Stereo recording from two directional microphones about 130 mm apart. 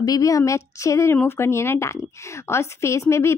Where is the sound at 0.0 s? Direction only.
25° left (ahead or behind).